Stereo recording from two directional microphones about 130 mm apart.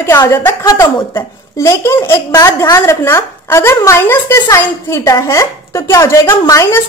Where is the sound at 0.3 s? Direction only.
20° left (ahead or behind).